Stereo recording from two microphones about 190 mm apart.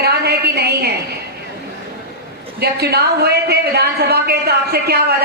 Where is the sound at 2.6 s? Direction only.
60° right (ahead or behind).